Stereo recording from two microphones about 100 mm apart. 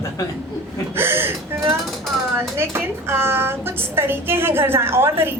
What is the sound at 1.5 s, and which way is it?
Mechanisms, 25° right (ahead or behind).